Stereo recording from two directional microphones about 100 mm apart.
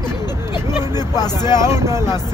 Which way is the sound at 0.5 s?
40° left (ahead or behind).